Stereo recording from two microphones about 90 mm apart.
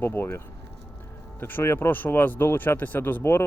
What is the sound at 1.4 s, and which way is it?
Speech, 25° left (ahead or behind).